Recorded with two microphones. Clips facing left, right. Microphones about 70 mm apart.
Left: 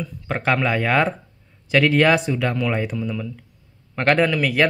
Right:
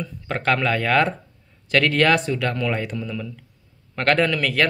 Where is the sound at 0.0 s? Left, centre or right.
Centre.